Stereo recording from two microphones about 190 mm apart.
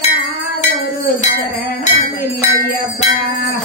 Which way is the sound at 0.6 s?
35° left (ahead or behind).